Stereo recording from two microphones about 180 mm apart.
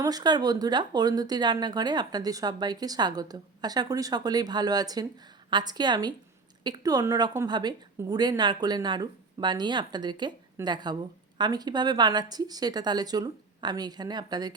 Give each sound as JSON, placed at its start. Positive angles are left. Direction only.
{"t": 0.0, "sound": "speech", "side_deg": -20}